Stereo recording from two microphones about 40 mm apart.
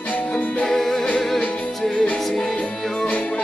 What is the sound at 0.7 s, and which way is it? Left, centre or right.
Music, centre.